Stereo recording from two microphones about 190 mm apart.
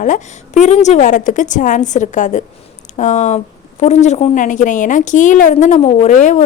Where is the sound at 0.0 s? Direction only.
40° left (ahead or behind).